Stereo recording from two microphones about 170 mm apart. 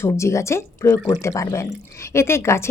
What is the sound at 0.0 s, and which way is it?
A woman's voice, 15° left (ahead or behind).